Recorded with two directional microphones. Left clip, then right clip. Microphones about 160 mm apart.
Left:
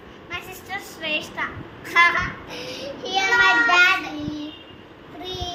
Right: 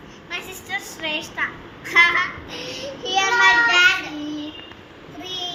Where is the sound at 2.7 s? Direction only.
15° left (ahead or behind).